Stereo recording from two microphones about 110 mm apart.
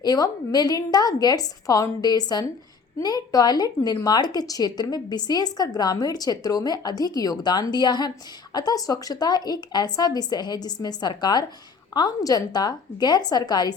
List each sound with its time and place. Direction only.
0.0 s a woman's voice: 35° left (ahead or behind)